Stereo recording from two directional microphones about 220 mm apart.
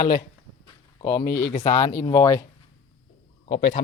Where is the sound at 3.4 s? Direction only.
30° left (ahead or behind).